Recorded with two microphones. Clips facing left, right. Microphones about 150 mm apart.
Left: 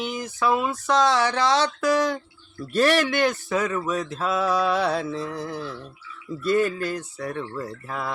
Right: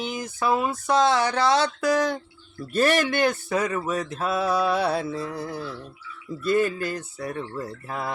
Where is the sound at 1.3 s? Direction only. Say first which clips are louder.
Even; 50° right (ahead or behind).